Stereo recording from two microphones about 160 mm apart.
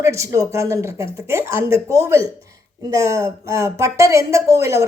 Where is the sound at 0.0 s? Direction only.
20° right (ahead or behind).